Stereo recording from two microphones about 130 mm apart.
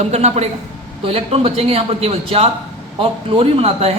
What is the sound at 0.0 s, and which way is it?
A woman's voice, 55° right (ahead or behind).